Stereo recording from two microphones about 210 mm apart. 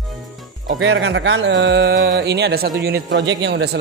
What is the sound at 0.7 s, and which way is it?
A man's voice, 65° right (ahead or behind).